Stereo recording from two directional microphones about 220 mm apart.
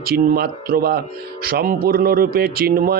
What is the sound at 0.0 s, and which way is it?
Speech, 45° right (ahead or behind).